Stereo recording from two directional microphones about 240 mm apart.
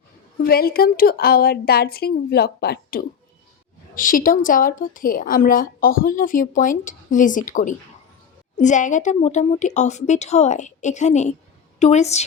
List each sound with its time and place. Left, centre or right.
0.4 s a woman's voice: left